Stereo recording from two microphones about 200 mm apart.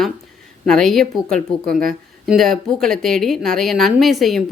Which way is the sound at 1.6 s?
45° right (ahead or behind).